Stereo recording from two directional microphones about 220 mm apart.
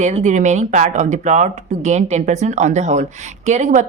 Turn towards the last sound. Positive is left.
turn(degrees=-35)  # may be behind; listen again after turning